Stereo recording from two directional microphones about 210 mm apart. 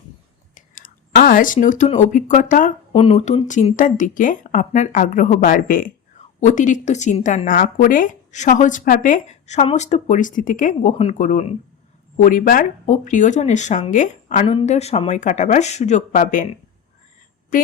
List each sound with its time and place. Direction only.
0.5 s a woman's voice: 40° left (ahead or behind)